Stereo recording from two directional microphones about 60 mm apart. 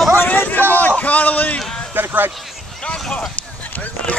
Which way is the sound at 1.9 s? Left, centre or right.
Right.